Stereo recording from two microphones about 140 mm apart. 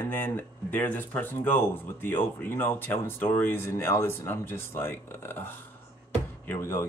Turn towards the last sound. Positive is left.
turn(degrees=20)  # may be behind; listen again after turning